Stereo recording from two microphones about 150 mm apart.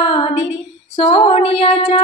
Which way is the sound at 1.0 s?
45° left (ahead or behind).